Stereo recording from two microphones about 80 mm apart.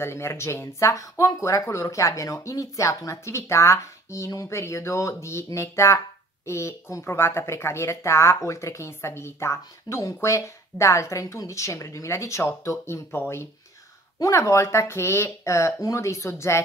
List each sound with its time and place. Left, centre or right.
0.0 s speech: left